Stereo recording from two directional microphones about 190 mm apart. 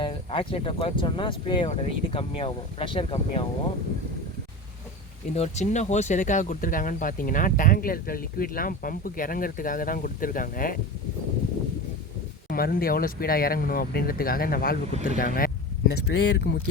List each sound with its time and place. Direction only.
0.0 s speech: 30° left (ahead or behind)
5.3 s speech: 35° left (ahead or behind)
12.5 s speech: 55° left (ahead or behind)
14.9 s speech: 40° right (ahead or behind)
15.2 s speech: 50° left (ahead or behind)